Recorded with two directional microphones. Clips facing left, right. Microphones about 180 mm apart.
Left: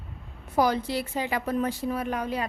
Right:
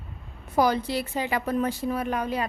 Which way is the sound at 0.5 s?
70° right (ahead or behind).